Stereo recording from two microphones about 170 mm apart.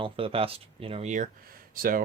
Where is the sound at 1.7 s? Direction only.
55° right (ahead or behind).